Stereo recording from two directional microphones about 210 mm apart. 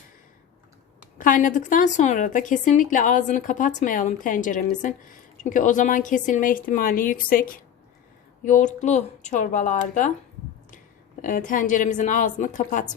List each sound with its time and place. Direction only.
1.2 s a woman's voice: 40° left (ahead or behind)
11.2 s a woman's voice: 40° left (ahead or behind)